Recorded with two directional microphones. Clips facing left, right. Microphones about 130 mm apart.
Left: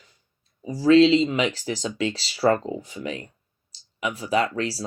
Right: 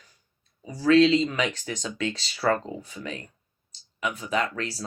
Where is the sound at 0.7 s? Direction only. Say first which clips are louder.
Left 3 dB; 30° left (ahead or behind).